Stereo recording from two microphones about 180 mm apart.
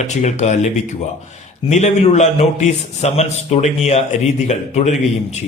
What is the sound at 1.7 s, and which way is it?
Speech, 40° left (ahead or behind).